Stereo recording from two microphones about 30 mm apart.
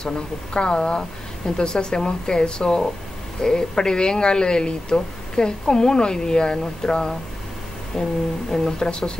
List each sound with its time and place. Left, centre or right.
0.0 s a woman's voice: left